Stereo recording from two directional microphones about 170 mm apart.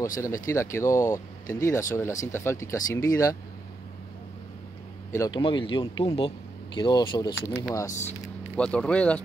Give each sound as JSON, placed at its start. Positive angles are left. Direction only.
{"t": 0.2, "sound": "speech", "side_deg": 15}
{"t": 5.1, "sound": "speech", "side_deg": 20}
{"t": 5.4, "sound": "speech", "side_deg": 30}
{"t": 7.8, "sound": "speech", "side_deg": 45}
{"t": 8.5, "sound": "speech", "side_deg": 5}